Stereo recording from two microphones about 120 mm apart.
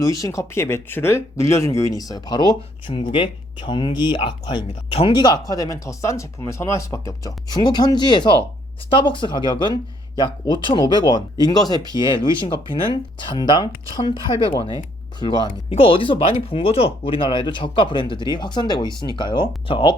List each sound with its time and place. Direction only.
0.0 s speech: 25° left (ahead or behind)
15.7 s speech: 50° left (ahead or behind)